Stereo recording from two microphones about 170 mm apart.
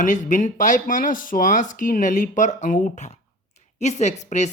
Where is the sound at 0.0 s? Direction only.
50° left (ahead or behind).